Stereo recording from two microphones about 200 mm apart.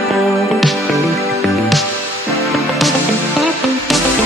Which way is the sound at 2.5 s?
Centre (ahead or behind).